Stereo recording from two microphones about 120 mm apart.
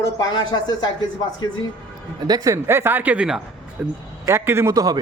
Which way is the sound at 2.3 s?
25° right (ahead or behind).